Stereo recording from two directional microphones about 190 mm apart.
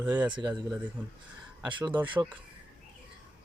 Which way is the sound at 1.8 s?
10° right (ahead or behind).